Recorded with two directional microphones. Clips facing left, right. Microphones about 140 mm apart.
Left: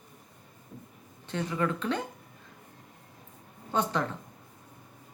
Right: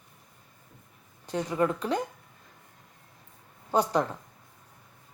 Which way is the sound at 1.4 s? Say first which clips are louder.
Right 3 dB; 35° right (ahead or behind).